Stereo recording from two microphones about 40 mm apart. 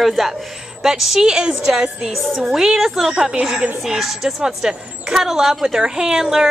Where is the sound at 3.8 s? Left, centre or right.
Centre.